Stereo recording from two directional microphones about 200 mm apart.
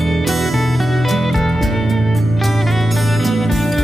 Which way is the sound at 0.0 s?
Centre (ahead or behind).